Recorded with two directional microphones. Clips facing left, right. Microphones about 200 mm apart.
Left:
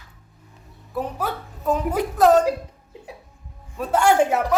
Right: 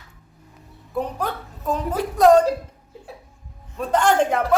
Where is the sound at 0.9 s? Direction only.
5° left (ahead or behind).